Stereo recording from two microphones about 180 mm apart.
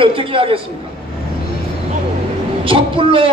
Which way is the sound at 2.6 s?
30° right (ahead or behind).